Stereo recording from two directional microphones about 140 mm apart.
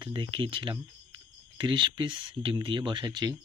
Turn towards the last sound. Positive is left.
turn(degrees=-30)  # may be behind; listen again after turning